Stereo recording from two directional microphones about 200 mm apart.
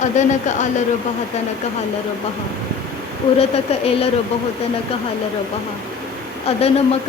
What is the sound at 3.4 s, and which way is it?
Speech, 30° left (ahead or behind).